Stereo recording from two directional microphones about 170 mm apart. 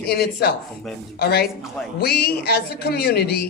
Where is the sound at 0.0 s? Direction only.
70° left (ahead or behind).